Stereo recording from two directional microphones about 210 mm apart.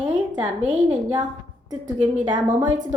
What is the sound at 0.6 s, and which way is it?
Speech, 35° right (ahead or behind).